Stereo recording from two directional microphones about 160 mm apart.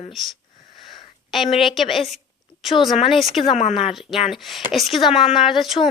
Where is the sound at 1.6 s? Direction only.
Centre (ahead or behind).